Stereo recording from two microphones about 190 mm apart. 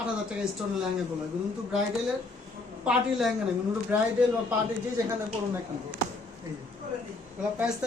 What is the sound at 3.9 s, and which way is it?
Speech, 10° right (ahead or behind).